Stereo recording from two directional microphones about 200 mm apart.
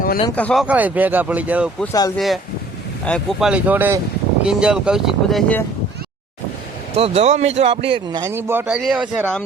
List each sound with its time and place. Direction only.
0.3 s speech: 5° left (ahead or behind)
0.6 s speech: 5° right (ahead or behind)
1.8 s speech: 15° left (ahead or behind)
2.1 s speech: centre (ahead or behind)
6.9 s a man's voice: 30° right (ahead or behind); by 9.3 s 5° right (ahead or behind)